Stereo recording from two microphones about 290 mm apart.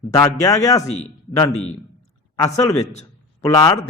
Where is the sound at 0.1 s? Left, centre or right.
Centre.